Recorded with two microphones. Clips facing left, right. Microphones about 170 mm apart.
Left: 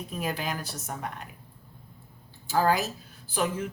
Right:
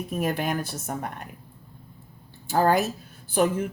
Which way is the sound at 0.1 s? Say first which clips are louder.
Right 5 dB; 55° right (ahead or behind).